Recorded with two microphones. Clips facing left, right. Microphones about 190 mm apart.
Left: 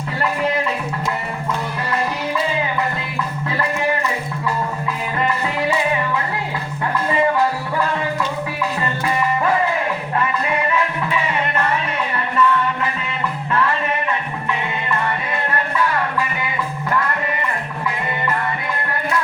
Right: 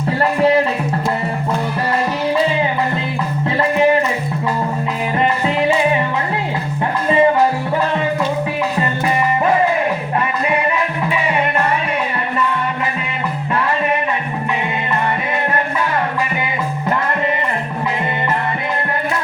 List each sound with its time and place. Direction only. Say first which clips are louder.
0.2 s music: right 6 dB; 40° right (ahead or behind)
5.2 s music: right 4 dB; 25° right (ahead or behind)
7.1 s music: right 5 dB; 25° right (ahead or behind)